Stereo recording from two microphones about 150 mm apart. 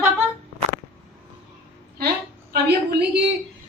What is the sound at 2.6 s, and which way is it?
Speech, 90° right.